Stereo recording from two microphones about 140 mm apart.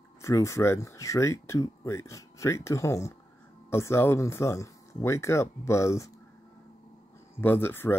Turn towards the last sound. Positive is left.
turn(degrees=15)  # may be behind; listen again after turning